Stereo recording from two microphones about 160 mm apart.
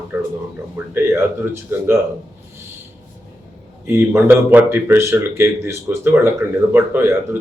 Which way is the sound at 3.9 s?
15° right (ahead or behind).